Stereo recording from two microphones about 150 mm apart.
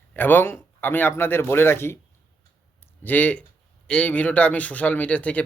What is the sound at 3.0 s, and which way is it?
A man's voice, 10° left (ahead or behind).